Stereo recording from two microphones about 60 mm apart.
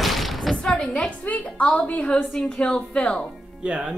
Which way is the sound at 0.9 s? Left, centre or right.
Left.